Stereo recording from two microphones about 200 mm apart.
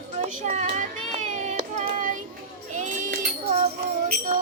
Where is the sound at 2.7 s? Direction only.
40° right (ahead or behind).